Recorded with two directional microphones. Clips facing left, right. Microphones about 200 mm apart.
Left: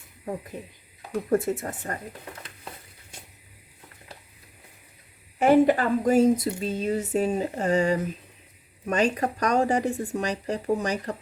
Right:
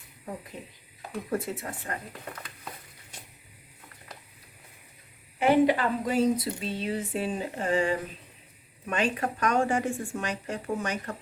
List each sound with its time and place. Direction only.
1.3 s speech: 45° left (ahead or behind)
5.4 s a woman's voice: 45° left (ahead or behind)